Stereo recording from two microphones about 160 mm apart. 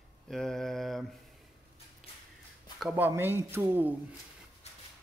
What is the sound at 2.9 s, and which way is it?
A man's voice, 15° right (ahead or behind).